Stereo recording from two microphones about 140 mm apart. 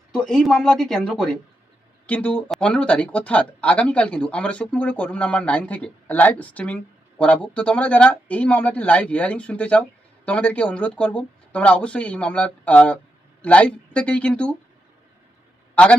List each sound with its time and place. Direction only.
0.1 s speech: 5° left (ahead or behind)
15.7 s a man's voice: 10° left (ahead or behind)